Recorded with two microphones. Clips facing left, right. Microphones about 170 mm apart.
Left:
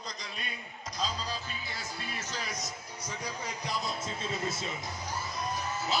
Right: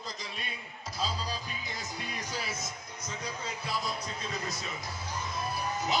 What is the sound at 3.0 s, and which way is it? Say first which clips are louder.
Speech: even; 10° left (ahead or behind).